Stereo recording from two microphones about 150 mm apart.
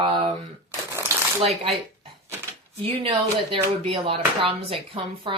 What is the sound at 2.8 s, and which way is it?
Speech, 40° right (ahead or behind).